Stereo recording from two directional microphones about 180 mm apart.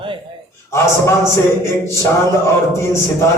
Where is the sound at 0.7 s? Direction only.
15° left (ahead or behind).